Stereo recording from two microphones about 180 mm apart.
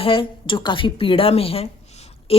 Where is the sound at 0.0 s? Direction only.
30° left (ahead or behind).